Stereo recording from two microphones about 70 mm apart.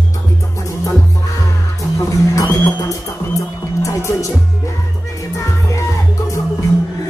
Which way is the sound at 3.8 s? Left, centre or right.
Left.